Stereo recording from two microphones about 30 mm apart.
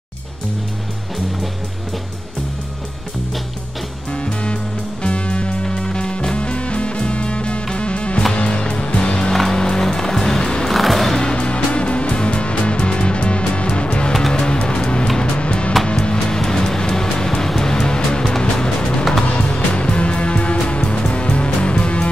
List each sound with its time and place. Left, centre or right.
4.1 s music: left
9.3 s music: centre
10.7 s music: centre
11.3 s music: left
15.9 s music: left